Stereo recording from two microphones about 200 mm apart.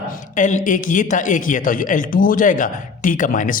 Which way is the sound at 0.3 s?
40° left (ahead or behind).